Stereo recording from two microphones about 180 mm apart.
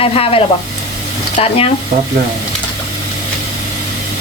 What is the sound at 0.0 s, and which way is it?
Speech, 30° left (ahead or behind).